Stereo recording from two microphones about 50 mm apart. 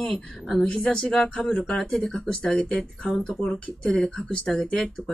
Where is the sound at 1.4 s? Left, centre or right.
Centre.